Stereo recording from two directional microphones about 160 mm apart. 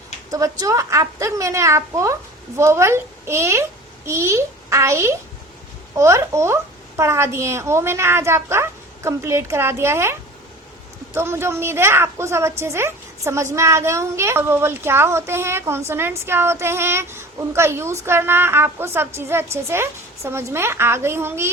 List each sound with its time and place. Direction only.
0.3 s a child's voice: 20° right (ahead or behind)